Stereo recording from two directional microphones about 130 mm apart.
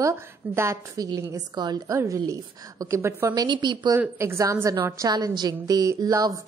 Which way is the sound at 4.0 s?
20° right (ahead or behind).